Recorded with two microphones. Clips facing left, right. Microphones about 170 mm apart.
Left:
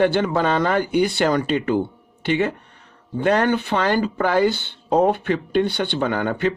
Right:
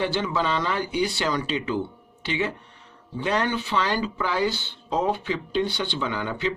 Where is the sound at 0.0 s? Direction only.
55° left (ahead or behind).